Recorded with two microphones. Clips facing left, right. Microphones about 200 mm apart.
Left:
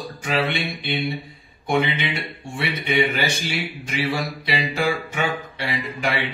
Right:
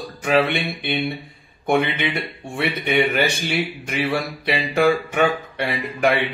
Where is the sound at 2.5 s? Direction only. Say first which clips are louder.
Right 2 dB; 60° right (ahead or behind).